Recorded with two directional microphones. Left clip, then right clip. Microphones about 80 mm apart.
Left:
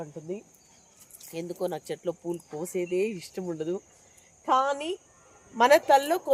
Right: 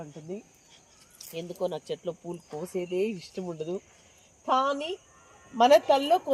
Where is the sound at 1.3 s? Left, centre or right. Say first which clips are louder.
Even; left.